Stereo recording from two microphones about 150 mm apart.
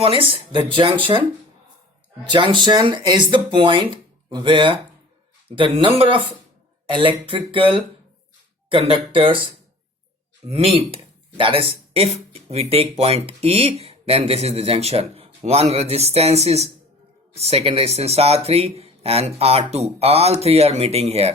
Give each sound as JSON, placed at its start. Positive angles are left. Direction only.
{"t": 0.0, "sound": "speech", "side_deg": -40}
{"t": 2.2, "sound": "speech", "side_deg": -35}
{"t": 10.4, "sound": "speech", "side_deg": -40}